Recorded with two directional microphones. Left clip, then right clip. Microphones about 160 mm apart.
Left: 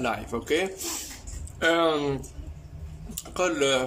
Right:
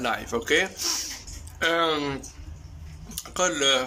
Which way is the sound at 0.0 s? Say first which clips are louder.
Right 2 dB; 5° left (ahead or behind).